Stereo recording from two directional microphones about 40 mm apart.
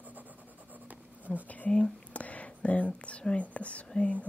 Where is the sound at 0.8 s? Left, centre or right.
Right.